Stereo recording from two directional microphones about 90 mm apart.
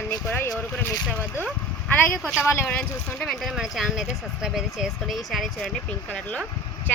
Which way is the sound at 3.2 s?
Centre (ahead or behind).